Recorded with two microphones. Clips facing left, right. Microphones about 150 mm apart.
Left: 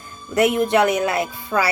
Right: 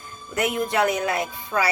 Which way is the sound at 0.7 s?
70° left (ahead or behind).